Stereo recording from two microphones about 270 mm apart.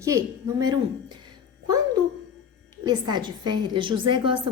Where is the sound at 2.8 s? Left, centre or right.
Centre.